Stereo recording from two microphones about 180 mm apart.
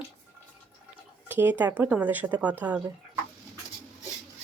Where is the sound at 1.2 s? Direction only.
10° right (ahead or behind).